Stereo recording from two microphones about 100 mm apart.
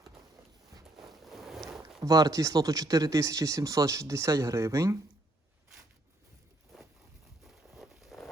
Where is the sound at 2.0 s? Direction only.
35° right (ahead or behind).